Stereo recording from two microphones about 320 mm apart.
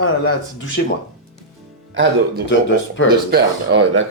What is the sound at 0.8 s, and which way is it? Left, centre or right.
Speech, left.